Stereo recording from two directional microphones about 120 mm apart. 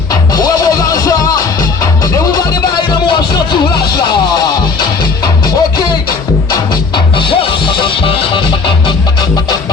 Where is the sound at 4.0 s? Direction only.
35° left (ahead or behind).